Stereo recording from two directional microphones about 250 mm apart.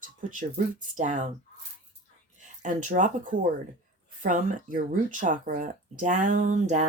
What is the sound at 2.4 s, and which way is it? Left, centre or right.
Speech, right.